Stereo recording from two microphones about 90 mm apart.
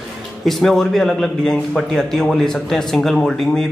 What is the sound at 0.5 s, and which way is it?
A man's voice, centre (ahead or behind).